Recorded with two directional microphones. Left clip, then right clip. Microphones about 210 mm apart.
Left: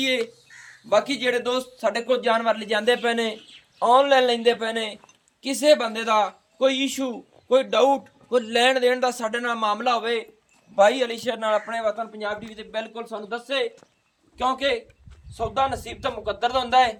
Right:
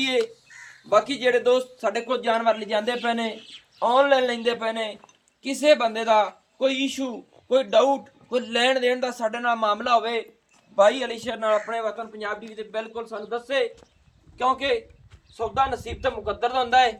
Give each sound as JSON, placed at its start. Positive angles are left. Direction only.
{"t": 0.0, "sound": "speech", "side_deg": 35}